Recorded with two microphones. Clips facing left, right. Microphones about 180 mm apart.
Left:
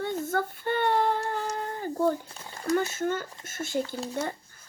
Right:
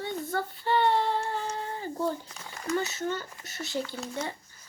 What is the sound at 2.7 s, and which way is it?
Speech, 50° left (ahead or behind).